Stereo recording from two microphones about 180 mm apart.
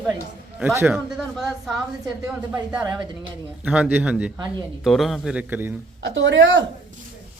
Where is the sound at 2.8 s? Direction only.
25° right (ahead or behind).